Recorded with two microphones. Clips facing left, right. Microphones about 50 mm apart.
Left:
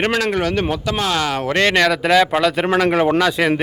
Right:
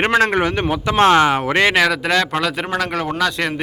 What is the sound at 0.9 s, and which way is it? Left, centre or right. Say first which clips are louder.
Speech: right 11 dB; right.